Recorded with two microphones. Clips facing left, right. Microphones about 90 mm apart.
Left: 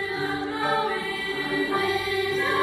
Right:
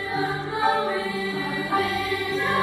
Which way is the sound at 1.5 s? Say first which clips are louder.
Left 4 dB; 20° right (ahead or behind).